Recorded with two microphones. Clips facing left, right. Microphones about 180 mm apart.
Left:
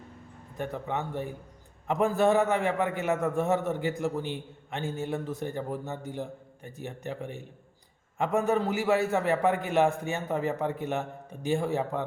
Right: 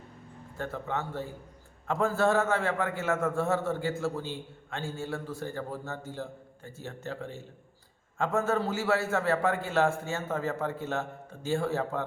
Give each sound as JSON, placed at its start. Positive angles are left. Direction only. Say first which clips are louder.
{"t": 0.5, "sound": "a man's voice", "louder": "left 2 dB", "side_deg": 15}